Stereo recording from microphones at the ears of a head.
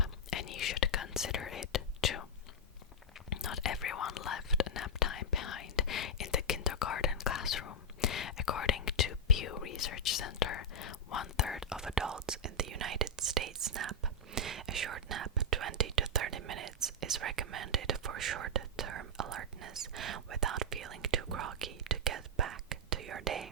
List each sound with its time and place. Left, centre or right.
0.0 s whispering: left
3.2 s whispering: left
12.1 s whispering: right